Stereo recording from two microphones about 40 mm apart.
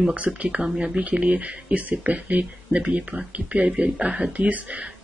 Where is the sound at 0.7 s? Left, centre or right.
Centre.